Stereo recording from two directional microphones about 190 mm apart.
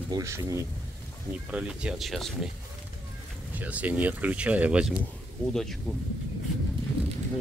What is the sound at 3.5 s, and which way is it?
Speech, 10° right (ahead or behind).